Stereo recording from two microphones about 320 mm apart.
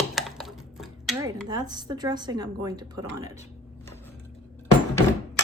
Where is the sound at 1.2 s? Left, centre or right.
Centre.